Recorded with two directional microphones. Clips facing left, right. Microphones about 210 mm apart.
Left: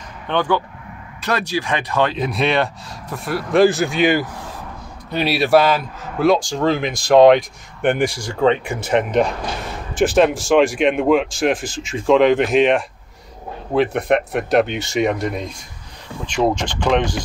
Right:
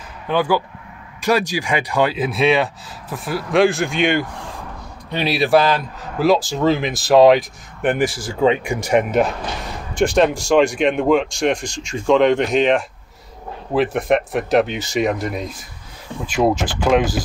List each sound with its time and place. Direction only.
0.3 s a man's voice: 5° right (ahead or behind)
9.9 s a man's voice: centre (ahead or behind)